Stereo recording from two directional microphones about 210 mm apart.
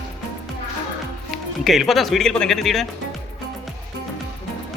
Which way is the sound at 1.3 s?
Centre (ahead or behind).